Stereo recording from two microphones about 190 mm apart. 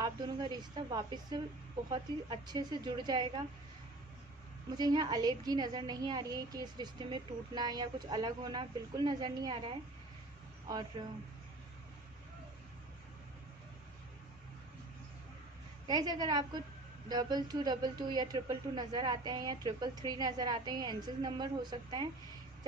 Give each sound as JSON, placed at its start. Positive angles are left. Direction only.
{"t": 0.0, "sound": "a woman's voice", "side_deg": -20}
{"t": 4.7, "sound": "a woman's voice", "side_deg": -20}
{"t": 15.9, "sound": "a woman's voice", "side_deg": -20}